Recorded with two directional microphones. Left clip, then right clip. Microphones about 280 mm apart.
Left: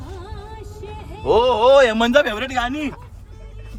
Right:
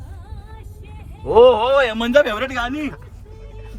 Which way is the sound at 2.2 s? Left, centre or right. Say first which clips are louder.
Right 1 dB; centre.